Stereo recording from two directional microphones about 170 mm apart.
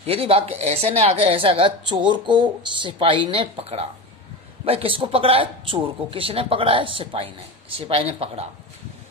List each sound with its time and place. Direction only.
0.0 s a woman's voice: 35° right (ahead or behind)